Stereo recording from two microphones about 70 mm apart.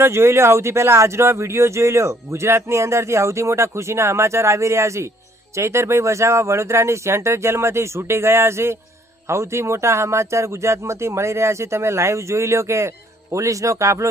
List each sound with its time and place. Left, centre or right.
0.0 s speech: right